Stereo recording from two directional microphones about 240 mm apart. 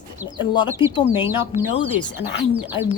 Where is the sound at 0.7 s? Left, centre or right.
Centre.